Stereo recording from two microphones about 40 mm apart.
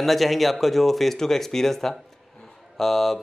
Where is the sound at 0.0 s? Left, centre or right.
Centre.